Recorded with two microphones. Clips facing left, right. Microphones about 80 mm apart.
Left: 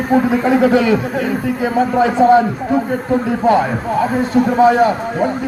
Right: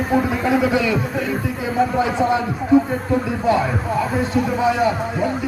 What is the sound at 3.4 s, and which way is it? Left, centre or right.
A man's voice, left.